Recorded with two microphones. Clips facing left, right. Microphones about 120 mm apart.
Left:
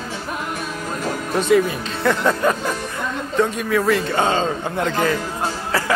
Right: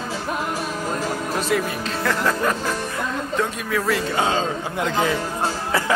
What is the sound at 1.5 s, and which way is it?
A man's voice, centre (ahead or behind).